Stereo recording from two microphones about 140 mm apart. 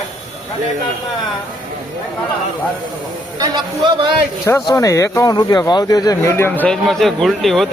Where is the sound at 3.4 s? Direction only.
35° right (ahead or behind).